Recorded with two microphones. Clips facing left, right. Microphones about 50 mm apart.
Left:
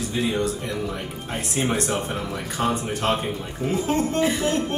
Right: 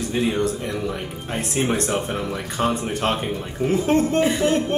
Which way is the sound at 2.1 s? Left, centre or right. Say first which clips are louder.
Right 2 dB; right.